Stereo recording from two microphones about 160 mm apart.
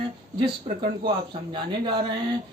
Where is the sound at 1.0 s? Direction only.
30° right (ahead or behind).